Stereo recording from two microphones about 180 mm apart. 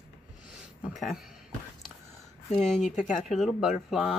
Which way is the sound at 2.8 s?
45° left (ahead or behind).